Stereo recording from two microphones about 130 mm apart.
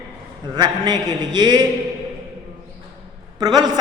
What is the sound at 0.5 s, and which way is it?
A man's voice, 35° right (ahead or behind).